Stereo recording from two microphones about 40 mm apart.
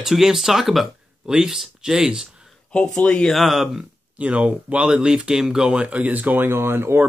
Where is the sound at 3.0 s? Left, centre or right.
Left.